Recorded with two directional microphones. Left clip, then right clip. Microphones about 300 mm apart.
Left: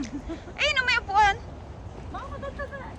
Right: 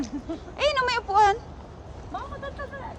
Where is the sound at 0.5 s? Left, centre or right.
Centre.